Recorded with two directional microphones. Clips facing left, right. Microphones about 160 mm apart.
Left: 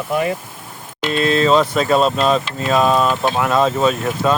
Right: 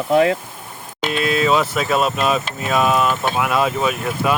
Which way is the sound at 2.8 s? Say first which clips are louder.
Left 1 dB; 30° left (ahead or behind).